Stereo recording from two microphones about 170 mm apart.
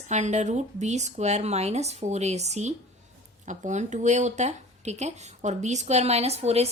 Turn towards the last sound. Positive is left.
turn(degrees=-40)  # may be behind; listen again after turning